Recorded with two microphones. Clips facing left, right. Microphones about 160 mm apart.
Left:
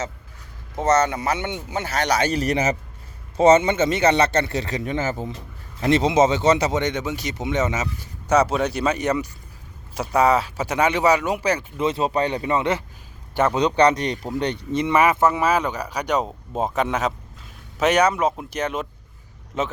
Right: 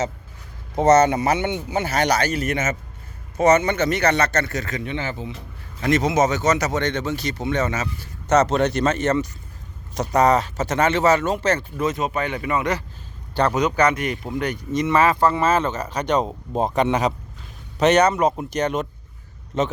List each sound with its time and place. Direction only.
0.8 s speech: 10° right (ahead or behind)
2.2 s a man's voice: 35° left (ahead or behind)
5.8 s speech: 25° left (ahead or behind)
8.3 s speech: 10° left (ahead or behind)
11.8 s a man's voice: 30° left (ahead or behind)
13.6 s a man's voice: 30° left (ahead or behind)
14.8 s speech: 20° left (ahead or behind)